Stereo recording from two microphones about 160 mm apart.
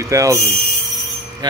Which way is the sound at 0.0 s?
20° right (ahead or behind).